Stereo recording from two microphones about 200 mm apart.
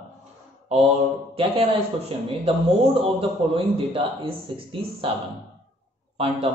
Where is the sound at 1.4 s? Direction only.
25° right (ahead or behind).